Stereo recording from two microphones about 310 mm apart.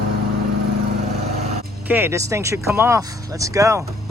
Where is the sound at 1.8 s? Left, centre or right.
Centre.